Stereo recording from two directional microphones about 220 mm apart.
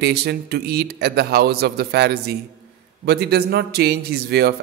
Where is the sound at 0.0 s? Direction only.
45° right (ahead or behind).